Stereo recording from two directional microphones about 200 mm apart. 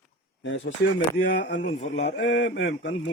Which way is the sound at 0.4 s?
70° left (ahead or behind).